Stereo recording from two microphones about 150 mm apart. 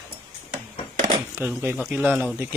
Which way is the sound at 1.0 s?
15° right (ahead or behind).